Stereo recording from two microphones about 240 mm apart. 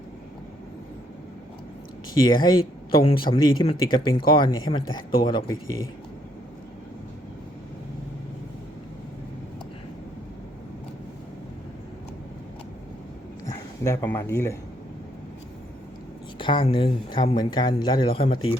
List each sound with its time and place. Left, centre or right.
2.2 s speech: centre
13.5 s speech: centre
16.4 s speech: left